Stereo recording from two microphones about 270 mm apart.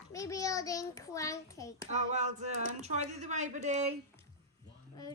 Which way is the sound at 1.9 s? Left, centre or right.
Right.